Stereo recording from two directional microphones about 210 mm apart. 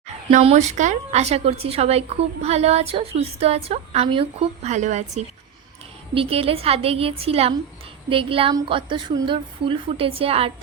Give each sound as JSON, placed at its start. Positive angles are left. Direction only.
{"t": 0.3, "sound": "a woman's voice", "side_deg": -35}